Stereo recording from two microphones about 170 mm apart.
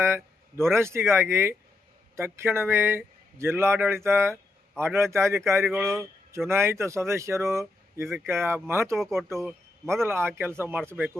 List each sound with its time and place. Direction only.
0.0 s speech: 15° right (ahead or behind)
5.7 s a man's voice: centre (ahead or behind)
6.5 s speech: 15° right (ahead or behind)